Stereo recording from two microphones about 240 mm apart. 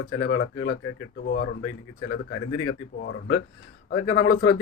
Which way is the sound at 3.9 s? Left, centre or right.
Left.